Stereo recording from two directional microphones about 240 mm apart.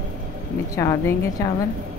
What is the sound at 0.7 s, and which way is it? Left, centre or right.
Speech, centre.